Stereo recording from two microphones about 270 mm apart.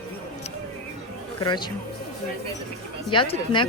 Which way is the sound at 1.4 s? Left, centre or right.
Centre.